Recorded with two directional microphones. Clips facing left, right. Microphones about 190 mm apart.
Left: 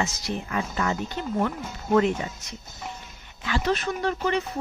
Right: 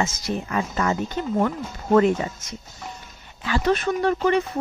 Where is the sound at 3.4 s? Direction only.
45° right (ahead or behind).